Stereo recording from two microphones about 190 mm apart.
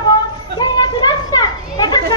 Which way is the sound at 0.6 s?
20° left (ahead or behind).